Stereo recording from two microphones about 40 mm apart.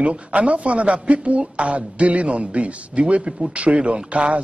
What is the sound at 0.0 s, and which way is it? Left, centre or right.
Speech, right.